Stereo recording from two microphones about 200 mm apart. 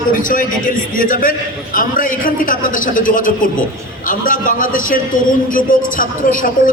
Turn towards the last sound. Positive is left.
turn(degrees=45)  # may be behind; listen again after turning